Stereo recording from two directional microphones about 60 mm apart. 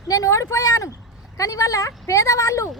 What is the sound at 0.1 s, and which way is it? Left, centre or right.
Speech, left.